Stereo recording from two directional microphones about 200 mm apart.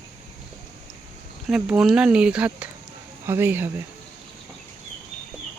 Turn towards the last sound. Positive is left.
turn(degrees=-10)  # may be behind; listen again after turning